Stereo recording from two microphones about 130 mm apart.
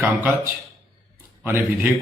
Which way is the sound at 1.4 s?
15° right (ahead or behind).